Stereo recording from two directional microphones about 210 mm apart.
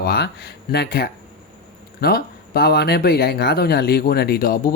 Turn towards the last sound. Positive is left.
turn(degrees=45)  # may be behind; listen again after turning